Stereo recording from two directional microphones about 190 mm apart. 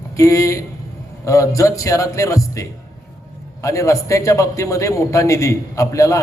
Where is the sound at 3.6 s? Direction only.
15° left (ahead or behind).